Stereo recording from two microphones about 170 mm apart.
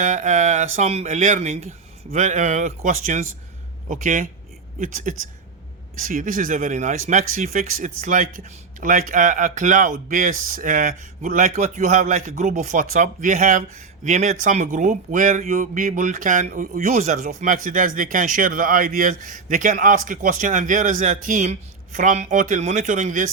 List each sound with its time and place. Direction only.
0.0 s speech: 45° right (ahead or behind)